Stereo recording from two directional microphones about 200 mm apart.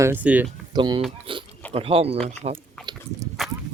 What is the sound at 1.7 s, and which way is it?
Speech, 30° right (ahead or behind).